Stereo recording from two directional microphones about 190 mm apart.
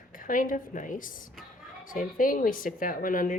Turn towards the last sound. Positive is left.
turn(degrees=45)  # may be behind; listen again after turning